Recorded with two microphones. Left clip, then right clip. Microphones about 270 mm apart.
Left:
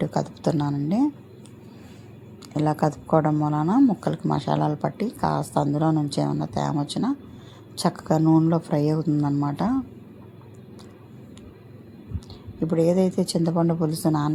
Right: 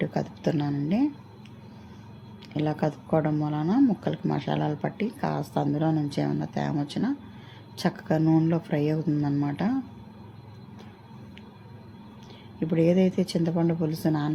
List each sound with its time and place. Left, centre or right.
0.0 s a woman's voice: centre
2.6 s speech: centre
12.6 s speech: centre